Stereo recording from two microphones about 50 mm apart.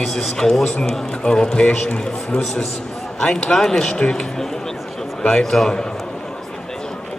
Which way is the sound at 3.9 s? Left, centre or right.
Centre.